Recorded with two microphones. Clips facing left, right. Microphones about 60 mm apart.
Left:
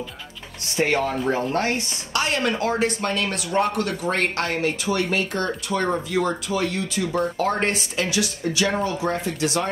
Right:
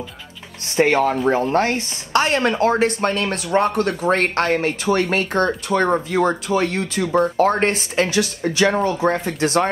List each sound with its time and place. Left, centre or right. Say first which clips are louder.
0.7 s speech: right 5 dB; right
2.1 s speech: right 5 dB; right